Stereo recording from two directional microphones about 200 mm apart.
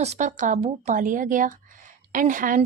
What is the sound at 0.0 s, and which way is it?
Speech, 35° right (ahead or behind).